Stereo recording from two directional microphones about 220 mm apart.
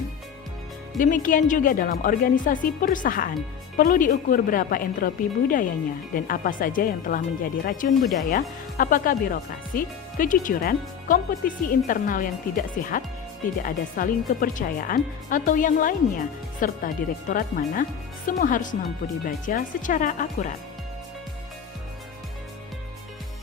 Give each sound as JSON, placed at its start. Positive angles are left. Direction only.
{"t": 0.9, "sound": "speech", "side_deg": 35}